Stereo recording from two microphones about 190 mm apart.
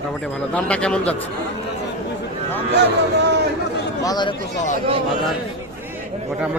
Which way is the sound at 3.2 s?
60° right (ahead or behind).